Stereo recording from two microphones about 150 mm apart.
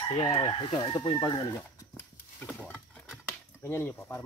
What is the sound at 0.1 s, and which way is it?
Speech, 35° left (ahead or behind).